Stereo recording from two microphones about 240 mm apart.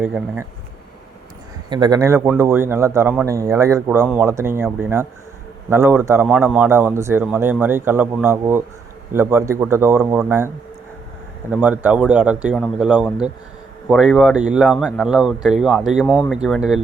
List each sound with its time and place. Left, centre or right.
0.0 s speech: centre
1.7 s a man's voice: centre
11.5 s speech: centre